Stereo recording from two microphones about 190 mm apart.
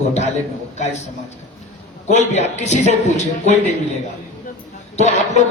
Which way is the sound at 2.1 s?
35° left (ahead or behind).